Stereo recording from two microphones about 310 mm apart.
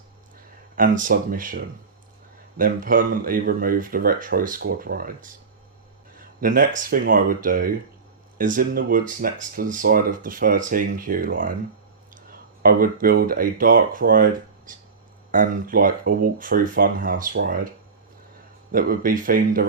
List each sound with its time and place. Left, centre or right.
0.8 s speech: right
18.7 s speech: right